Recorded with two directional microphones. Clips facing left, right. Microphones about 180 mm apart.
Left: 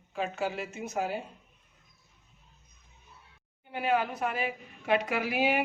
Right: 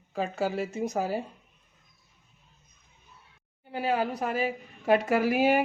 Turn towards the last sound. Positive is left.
turn(degrees=-45)  # may be behind; listen again after turning